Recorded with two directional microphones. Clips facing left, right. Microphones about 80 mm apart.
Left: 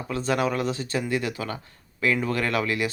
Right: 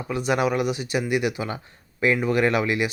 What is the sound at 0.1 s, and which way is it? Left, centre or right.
Speech, centre.